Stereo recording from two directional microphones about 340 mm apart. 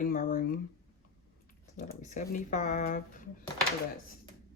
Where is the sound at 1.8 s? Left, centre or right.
Left.